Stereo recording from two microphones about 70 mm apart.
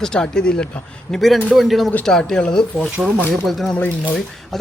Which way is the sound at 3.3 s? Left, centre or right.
Centre.